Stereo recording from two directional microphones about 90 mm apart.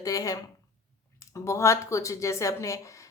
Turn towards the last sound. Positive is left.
turn(degrees=35)  # may be behind; listen again after turning